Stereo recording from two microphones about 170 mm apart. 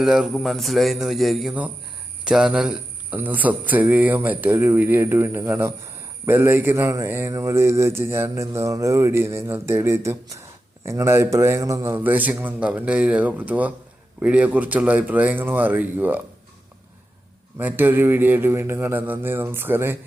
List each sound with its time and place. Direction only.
0.0 s a man's voice: centre (ahead or behind)
17.6 s a man's voice: 10° right (ahead or behind)